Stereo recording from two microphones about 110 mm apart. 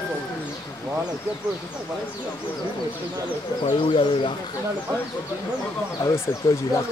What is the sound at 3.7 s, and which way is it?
Speech, 50° left (ahead or behind).